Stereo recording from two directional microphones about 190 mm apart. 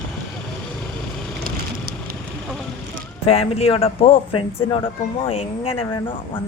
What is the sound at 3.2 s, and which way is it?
Speech, 30° left (ahead or behind).